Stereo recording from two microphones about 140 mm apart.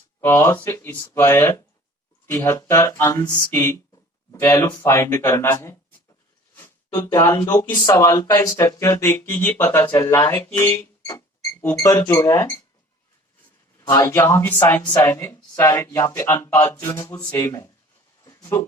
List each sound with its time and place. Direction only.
0.2 s speech: 15° left (ahead or behind)
13.8 s speech: 25° left (ahead or behind)
17.1 s speech: 10° left (ahead or behind)
17.3 s speech: 25° left (ahead or behind)
18.3 s a sound: 25° left (ahead or behind)